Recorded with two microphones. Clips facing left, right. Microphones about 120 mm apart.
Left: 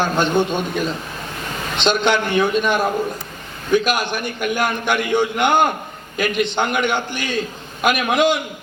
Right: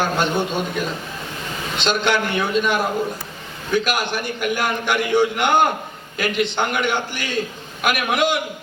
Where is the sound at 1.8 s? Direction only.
20° left (ahead or behind).